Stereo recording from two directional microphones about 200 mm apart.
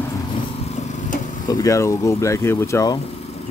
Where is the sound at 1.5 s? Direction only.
15° left (ahead or behind).